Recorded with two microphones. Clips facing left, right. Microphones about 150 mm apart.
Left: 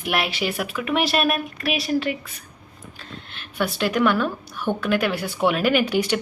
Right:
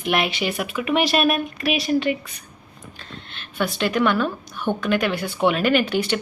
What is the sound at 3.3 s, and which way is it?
A woman's voice, 5° left (ahead or behind).